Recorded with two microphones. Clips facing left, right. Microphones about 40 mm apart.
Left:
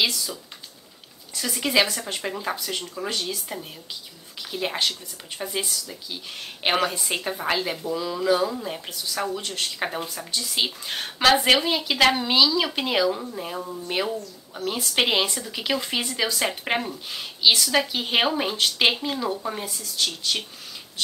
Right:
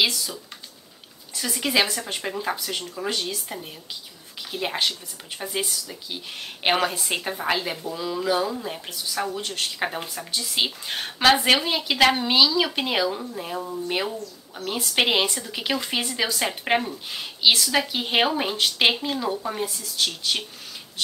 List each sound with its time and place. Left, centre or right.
1.3 s speech: centre